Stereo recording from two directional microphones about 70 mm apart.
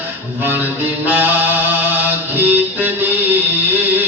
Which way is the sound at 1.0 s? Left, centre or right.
Right.